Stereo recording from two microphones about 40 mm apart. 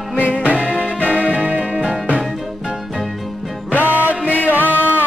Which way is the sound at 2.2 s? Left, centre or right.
Centre.